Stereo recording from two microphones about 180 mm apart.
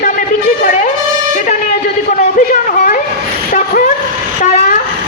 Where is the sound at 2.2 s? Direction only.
45° left (ahead or behind).